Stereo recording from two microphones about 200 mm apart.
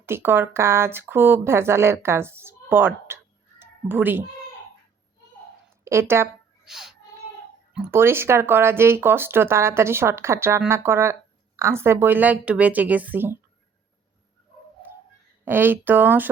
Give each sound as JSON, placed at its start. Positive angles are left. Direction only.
{"t": 0.0, "sound": "speech", "side_deg": -10}
{"t": 3.6, "sound": "cat", "side_deg": -10}
{"t": 5.8, "sound": "speech", "side_deg": -15}
{"t": 6.7, "sound": "speech", "side_deg": 0}
{"t": 15.4, "sound": "speech", "side_deg": -10}